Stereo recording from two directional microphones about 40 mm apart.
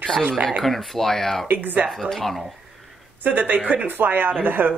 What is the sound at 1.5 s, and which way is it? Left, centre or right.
Speech, right.